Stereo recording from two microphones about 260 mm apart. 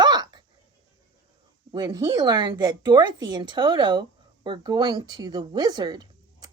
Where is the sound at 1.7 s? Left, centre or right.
Centre.